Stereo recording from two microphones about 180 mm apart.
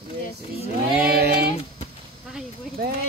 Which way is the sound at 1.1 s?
60° right (ahead or behind).